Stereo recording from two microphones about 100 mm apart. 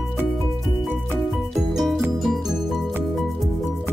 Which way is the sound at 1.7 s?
Centre (ahead or behind).